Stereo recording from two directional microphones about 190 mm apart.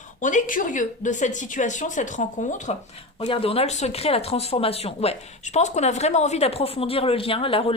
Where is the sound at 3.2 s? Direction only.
30° left (ahead or behind).